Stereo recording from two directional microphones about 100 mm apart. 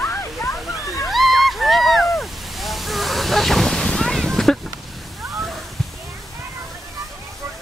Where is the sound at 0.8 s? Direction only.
30° left (ahead or behind).